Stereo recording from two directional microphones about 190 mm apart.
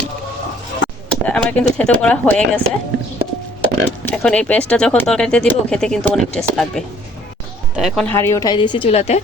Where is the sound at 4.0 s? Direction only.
10° left (ahead or behind).